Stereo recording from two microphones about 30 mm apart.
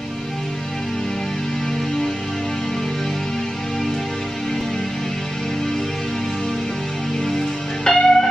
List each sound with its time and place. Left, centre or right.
7.3 s music: centre